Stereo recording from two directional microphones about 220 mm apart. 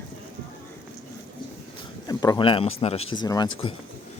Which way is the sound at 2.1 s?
15° left (ahead or behind).